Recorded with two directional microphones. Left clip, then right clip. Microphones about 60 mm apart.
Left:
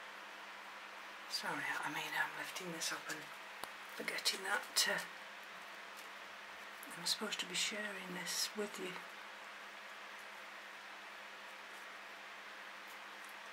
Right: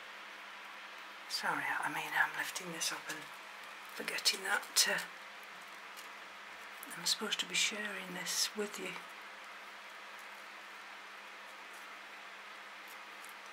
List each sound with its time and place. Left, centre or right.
1.5 s speech: centre
2.5 s speech: right
4.0 s speech: right
7.0 s speech: right